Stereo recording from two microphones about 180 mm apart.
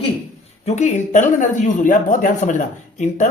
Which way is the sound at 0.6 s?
40° left (ahead or behind).